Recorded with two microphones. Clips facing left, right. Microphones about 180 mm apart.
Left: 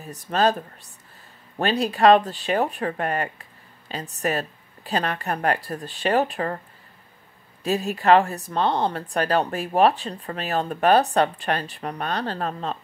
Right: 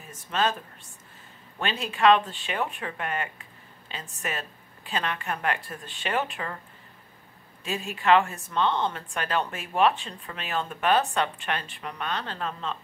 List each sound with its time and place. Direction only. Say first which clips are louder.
0.0 s speech: left 6 dB; 40° left (ahead or behind)
7.6 s speech: left 6 dB; 40° left (ahead or behind)